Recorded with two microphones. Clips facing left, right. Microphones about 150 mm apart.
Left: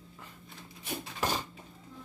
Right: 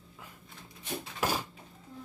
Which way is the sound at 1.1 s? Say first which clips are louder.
Right 1 dB; 10° right (ahead or behind).